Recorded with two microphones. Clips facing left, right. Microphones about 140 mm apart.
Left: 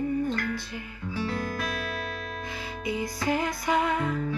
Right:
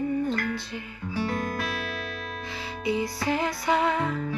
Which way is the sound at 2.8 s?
25° right (ahead or behind).